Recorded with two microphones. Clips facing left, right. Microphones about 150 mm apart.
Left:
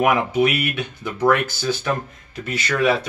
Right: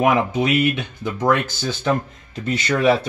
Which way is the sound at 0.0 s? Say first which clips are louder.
Even; 25° right (ahead or behind).